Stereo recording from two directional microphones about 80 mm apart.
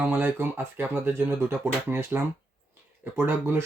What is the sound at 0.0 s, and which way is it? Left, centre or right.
Speech, right.